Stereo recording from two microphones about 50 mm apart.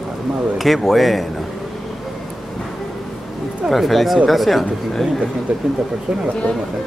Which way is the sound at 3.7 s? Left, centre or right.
Centre.